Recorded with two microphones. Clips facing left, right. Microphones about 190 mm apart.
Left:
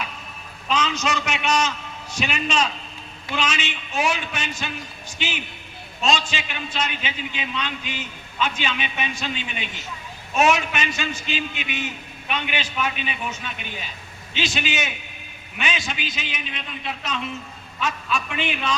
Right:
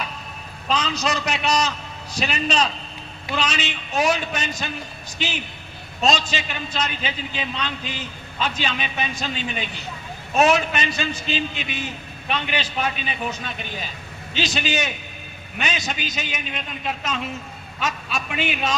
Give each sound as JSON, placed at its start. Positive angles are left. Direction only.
{"t": 0.7, "sound": "a man's voice", "side_deg": -35}